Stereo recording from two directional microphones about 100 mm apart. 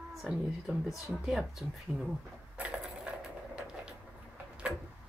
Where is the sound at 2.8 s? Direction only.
5° right (ahead or behind).